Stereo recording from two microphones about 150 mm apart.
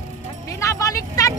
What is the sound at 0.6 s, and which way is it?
Music, 20° left (ahead or behind).